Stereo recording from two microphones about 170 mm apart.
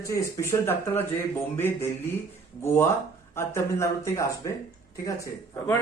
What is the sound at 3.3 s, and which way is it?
Speech, 15° left (ahead or behind).